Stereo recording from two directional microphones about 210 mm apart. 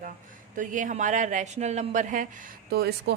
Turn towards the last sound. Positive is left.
turn(degrees=-50)  # may be behind; listen again after turning